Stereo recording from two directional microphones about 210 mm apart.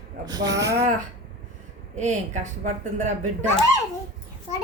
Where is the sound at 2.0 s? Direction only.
35° right (ahead or behind).